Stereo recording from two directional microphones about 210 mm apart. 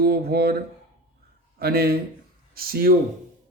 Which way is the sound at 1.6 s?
45° right (ahead or behind).